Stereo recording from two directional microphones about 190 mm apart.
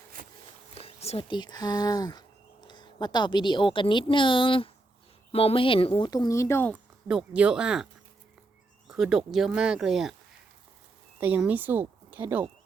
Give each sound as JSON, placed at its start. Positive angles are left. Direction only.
{"t": 0.7, "sound": "speech", "side_deg": 30}
{"t": 7.1, "sound": "speech", "side_deg": -5}
{"t": 8.9, "sound": "speech", "side_deg": 0}
{"t": 11.2, "sound": "speech", "side_deg": -10}